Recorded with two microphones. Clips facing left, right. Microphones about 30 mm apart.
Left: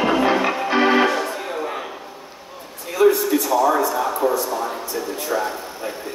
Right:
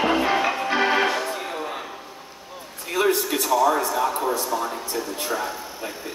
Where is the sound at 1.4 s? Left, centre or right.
Centre.